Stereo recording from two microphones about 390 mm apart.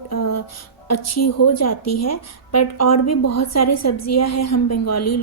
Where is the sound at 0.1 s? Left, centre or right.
Left.